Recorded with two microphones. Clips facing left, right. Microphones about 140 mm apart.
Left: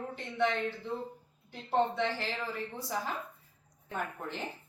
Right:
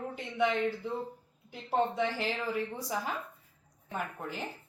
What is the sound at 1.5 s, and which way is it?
Speech, 10° right (ahead or behind).